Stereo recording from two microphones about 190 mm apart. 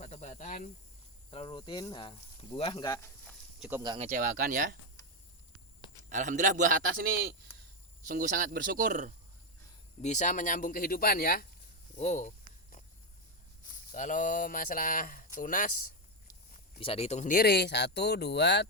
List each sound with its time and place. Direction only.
0.0 s snake: 35° left (ahead or behind)
1.3 s speech: 25° left (ahead or behind)
3.6 s speech: 10° right (ahead or behind)
3.8 s a man's voice: 35° right (ahead or behind)
4.2 s speech: 50° right (ahead or behind)
6.1 s a man's voice: 40° right (ahead or behind)
8.0 s speech: 45° right (ahead or behind)
10.0 s speech: 40° left (ahead or behind)
11.9 s speech: 40° left (ahead or behind)
13.9 s speech: 40° left (ahead or behind)
16.2 s a sound: 50° left (ahead or behind)
16.8 s speech: 30° left (ahead or behind)
17.3 s speech: 60° left (ahead or behind)